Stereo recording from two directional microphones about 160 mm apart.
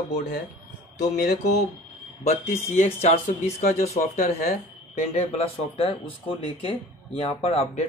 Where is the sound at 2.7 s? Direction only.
45° left (ahead or behind).